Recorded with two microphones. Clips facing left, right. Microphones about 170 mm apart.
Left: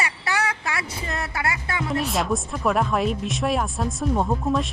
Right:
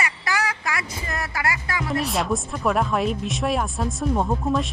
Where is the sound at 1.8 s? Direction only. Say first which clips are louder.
Even; centre (ahead or behind).